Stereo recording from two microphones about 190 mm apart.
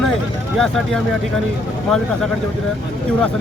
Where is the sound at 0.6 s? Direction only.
Centre (ahead or behind).